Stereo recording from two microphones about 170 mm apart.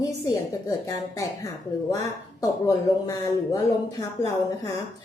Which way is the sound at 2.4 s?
20° left (ahead or behind).